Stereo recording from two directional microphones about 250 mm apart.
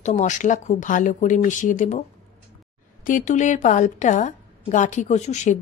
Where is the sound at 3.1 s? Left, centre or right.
Left.